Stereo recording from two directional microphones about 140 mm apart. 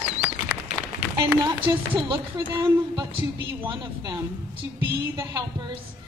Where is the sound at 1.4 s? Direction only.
30° right (ahead or behind).